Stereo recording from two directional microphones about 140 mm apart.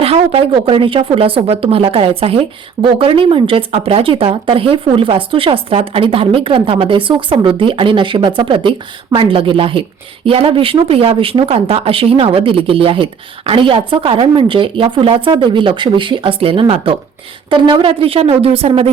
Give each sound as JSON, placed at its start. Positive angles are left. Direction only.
{"t": 0.0, "sound": "speech", "side_deg": -45}